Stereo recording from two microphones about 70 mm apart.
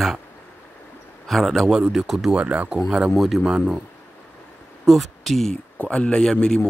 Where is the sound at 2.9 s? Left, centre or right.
Centre.